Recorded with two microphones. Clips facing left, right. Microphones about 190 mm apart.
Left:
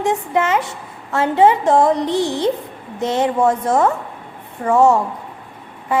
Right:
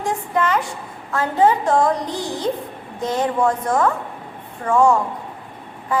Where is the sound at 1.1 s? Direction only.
25° left (ahead or behind).